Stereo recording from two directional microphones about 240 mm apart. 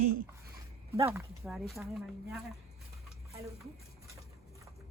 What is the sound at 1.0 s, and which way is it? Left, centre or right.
Speech, centre.